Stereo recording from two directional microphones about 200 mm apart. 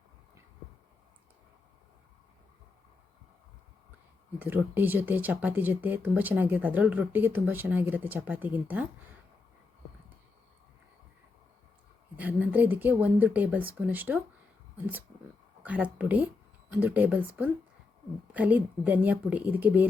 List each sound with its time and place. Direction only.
4.4 s speech: 10° right (ahead or behind)
12.1 s speech: 10° right (ahead or behind)
15.6 s speech: 5° right (ahead or behind)